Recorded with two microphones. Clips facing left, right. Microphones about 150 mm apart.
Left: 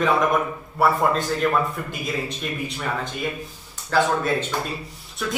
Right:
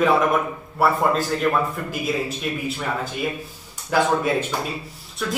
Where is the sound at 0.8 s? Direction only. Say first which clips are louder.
Even; centre (ahead or behind).